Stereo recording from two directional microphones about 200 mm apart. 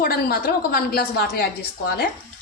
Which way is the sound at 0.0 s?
50° left (ahead or behind).